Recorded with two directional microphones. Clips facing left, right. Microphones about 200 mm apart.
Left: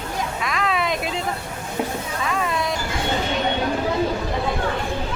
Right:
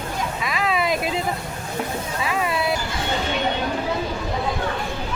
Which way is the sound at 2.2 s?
5° right (ahead or behind).